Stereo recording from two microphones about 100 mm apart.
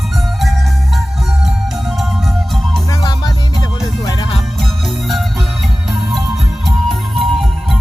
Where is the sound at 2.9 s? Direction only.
40° left (ahead or behind).